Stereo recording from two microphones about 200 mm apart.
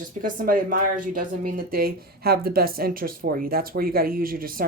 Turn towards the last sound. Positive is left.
turn(degrees=-45)  # may be behind; listen again after turning